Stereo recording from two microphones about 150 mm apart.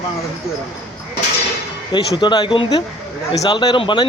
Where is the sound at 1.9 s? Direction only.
30° left (ahead or behind).